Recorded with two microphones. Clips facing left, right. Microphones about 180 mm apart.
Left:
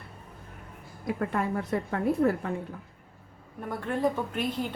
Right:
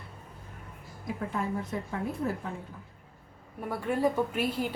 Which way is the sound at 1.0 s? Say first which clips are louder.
Left 4 dB; 65° left (ahead or behind).